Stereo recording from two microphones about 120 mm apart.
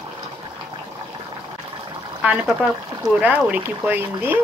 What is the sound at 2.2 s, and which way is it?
Speech, 10° right (ahead or behind).